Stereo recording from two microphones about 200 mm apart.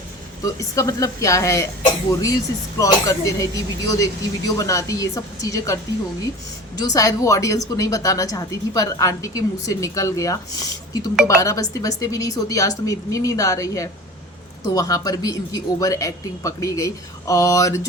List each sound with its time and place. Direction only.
0.4 s speech: 15° left (ahead or behind)